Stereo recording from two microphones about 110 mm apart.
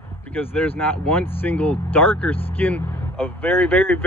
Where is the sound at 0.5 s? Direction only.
15° left (ahead or behind).